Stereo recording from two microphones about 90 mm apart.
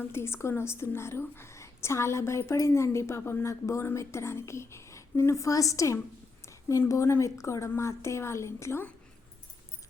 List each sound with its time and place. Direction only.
0.0 s a woman's voice: 25° left (ahead or behind)